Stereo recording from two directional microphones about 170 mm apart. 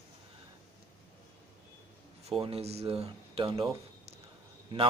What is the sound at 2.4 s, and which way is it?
Speech, 35° right (ahead or behind).